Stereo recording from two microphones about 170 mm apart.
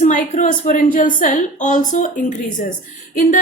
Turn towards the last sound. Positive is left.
turn(degrees=50)  # may be behind; listen again after turning